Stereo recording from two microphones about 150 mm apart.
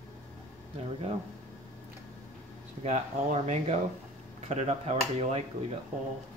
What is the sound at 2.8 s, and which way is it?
Speech, 50° right (ahead or behind).